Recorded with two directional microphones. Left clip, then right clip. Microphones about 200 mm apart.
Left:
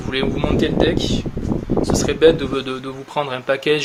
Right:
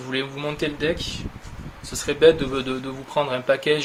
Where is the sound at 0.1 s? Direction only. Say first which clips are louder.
Left 7 dB; 25° left (ahead or behind).